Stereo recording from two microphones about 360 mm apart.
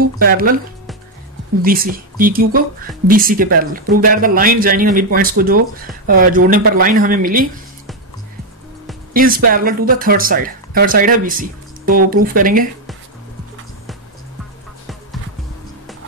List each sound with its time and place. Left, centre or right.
0.0 s speech: right
1.6 s speech: right
9.1 s speech: right